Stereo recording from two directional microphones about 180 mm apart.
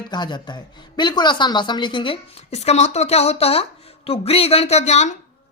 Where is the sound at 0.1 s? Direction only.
25° left (ahead or behind).